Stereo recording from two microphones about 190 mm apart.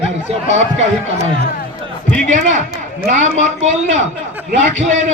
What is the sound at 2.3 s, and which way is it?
A man's voice, 40° right (ahead or behind).